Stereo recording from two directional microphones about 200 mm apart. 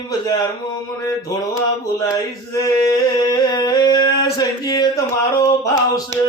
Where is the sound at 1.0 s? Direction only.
15° left (ahead or behind).